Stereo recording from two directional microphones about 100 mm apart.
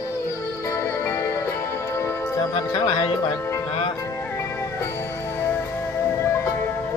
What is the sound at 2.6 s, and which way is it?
Speech, 50° left (ahead or behind).